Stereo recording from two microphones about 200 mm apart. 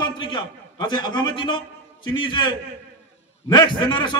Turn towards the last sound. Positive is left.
turn(degrees=25)  # may be behind; listen again after turning